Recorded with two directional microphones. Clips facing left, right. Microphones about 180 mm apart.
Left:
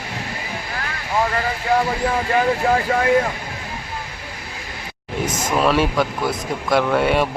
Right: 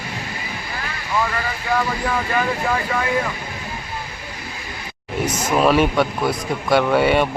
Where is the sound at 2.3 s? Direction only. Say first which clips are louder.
Left 6 dB; 35° left (ahead or behind).